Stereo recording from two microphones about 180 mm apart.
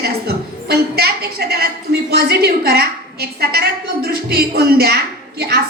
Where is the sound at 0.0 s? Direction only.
60° right (ahead or behind).